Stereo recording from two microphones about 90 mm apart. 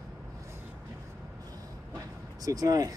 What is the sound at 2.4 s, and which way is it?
Speech, 40° right (ahead or behind).